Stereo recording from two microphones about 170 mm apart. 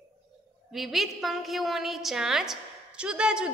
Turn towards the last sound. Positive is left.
turn(degrees=-5)  # may be behind; listen again after turning